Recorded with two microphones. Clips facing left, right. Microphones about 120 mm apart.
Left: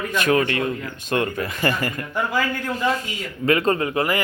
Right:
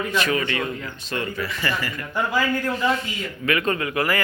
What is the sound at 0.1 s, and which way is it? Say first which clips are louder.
Speech: left 7 dB; 50° left (ahead or behind).